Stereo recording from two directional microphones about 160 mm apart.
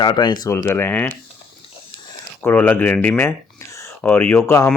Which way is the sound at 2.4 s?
10° left (ahead or behind).